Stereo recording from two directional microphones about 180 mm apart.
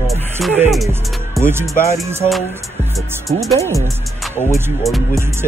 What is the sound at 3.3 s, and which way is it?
Speech, centre (ahead or behind).